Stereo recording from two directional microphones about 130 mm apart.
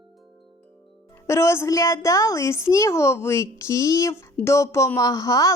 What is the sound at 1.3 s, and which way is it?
A woman's voice, 20° left (ahead or behind).